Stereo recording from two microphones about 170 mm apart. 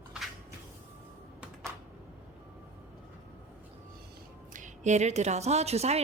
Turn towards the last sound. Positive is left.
turn(degrees=-40)  # may be behind; listen again after turning